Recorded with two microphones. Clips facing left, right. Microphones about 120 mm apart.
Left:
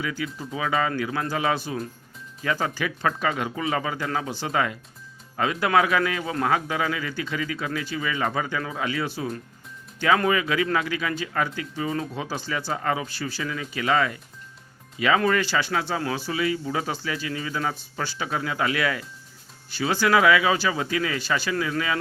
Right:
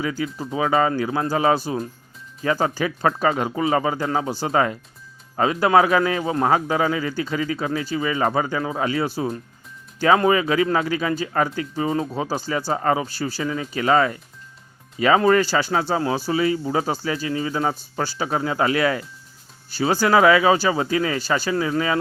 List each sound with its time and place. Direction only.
0.0 s speech: 35° right (ahead or behind)